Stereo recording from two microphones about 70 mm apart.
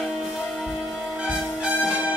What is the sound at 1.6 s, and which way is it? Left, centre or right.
Music, centre.